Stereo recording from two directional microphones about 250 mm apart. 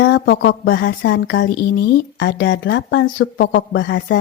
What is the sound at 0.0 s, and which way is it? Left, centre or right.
Speech, left.